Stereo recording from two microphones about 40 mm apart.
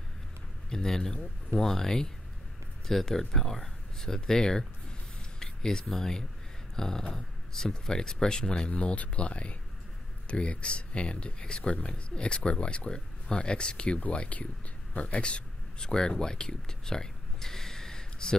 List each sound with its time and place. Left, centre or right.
0.7 s speech: centre
5.4 s a sound: centre
5.9 s speech: centre
8.6 s speech: left; by 18.3 s centre